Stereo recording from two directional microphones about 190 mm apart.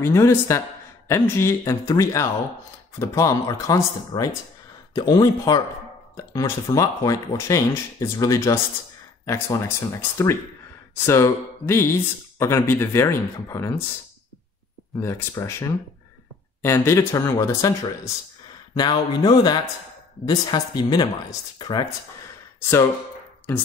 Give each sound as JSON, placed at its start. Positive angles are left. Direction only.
{"t": 0.0, "sound": "speech", "side_deg": 15}
{"t": 11.1, "sound": "speech", "side_deg": 15}
{"t": 15.0, "sound": "speech", "side_deg": 15}